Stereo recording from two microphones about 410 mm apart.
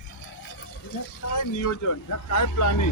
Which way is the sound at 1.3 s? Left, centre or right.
Left.